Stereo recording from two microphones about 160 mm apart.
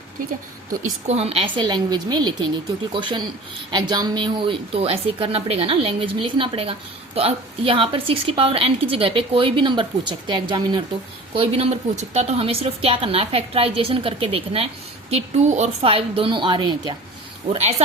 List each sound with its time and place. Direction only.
1.0 s a woman's voice: 40° right (ahead or behind)
17.5 s a woman's voice: 40° right (ahead or behind)